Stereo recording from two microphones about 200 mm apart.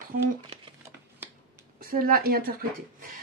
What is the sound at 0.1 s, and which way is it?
Speech, 45° right (ahead or behind).